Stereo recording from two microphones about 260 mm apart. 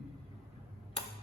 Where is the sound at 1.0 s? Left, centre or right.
Left.